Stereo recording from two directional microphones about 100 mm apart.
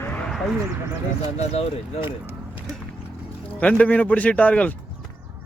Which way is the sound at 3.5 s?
15° left (ahead or behind).